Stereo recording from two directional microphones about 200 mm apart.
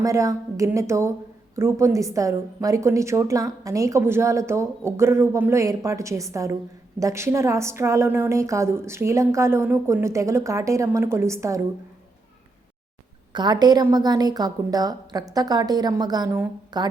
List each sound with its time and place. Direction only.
0.0 s a woman's voice: 15° right (ahead or behind)
13.3 s a woman's voice: 20° right (ahead or behind)